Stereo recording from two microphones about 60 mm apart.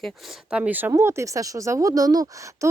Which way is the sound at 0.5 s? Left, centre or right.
Right.